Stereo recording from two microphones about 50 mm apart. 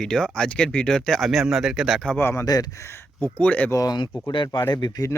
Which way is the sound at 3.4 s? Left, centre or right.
Left.